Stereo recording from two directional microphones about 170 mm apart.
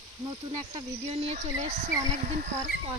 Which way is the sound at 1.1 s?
35° right (ahead or behind).